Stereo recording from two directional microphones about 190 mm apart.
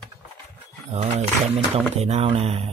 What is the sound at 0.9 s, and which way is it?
A man's voice, 35° right (ahead or behind).